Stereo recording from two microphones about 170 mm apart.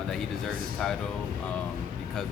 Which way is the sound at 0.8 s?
5° left (ahead or behind).